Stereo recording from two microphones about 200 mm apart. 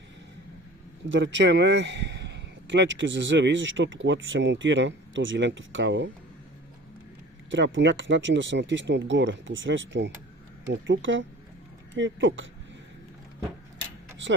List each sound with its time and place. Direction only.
1.0 s speech: 65° right (ahead or behind)
7.5 s speech: 65° right (ahead or behind)